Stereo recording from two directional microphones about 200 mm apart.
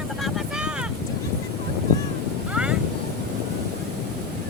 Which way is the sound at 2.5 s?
5° right (ahead or behind).